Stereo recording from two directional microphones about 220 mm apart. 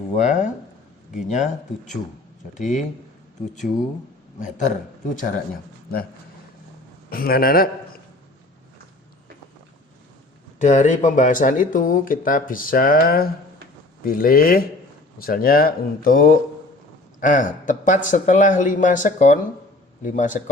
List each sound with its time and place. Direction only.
0.2 s speech: 35° left (ahead or behind)
2.6 s speech: 35° left (ahead or behind)
4.4 s speech: 35° left (ahead or behind)
7.1 s speech: 40° left (ahead or behind)
10.6 s speech: 35° left (ahead or behind)